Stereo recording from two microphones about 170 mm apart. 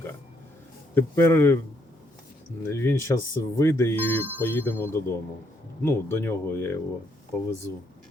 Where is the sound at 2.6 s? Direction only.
15° left (ahead or behind).